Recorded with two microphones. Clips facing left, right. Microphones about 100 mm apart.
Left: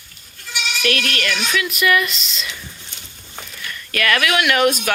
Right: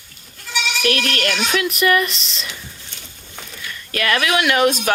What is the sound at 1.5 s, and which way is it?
Speech, 45° right (ahead or behind).